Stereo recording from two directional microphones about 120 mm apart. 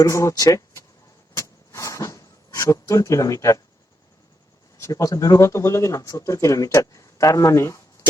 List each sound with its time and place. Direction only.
0.0 s speech: 25° left (ahead or behind)
1.3 s vehicle: 25° left (ahead or behind)
4.8 s speech: 25° left (ahead or behind)